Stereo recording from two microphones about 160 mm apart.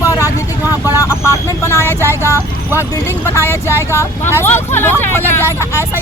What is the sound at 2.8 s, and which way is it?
Speech, 15° left (ahead or behind).